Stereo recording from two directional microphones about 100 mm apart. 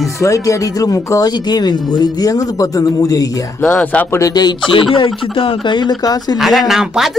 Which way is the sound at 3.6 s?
15° left (ahead or behind).